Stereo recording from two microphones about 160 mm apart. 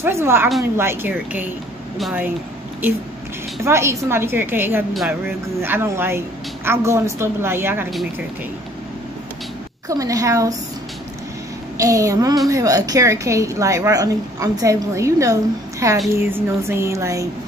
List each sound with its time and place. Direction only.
0.0 s a woman's voice: 15° right (ahead or behind)
2.0 s speech: centre (ahead or behind)
3.6 s a woman's voice: 15° right (ahead or behind)
9.8 s a woman's voice: 20° right (ahead or behind)
11.7 s a woman's voice: 20° right (ahead or behind)